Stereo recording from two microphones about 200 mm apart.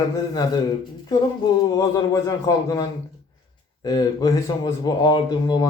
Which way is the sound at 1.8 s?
15° left (ahead or behind).